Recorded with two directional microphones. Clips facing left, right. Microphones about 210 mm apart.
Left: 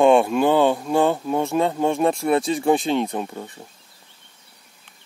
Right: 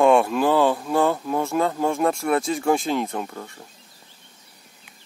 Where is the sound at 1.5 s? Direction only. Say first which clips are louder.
Left 2 dB; 30° left (ahead or behind).